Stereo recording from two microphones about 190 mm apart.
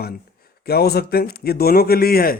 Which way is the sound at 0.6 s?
55° left (ahead or behind).